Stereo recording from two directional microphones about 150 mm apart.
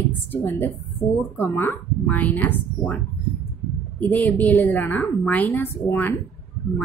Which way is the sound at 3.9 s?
10° left (ahead or behind).